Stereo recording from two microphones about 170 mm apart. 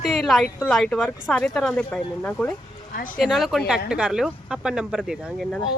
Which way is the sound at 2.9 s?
55° left (ahead or behind).